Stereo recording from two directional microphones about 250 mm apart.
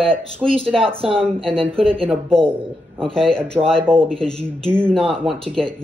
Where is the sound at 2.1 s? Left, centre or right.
Centre.